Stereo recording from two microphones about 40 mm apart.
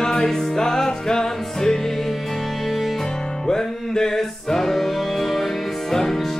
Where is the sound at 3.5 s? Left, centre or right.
Centre.